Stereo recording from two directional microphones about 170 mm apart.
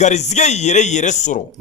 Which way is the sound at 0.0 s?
40° left (ahead or behind).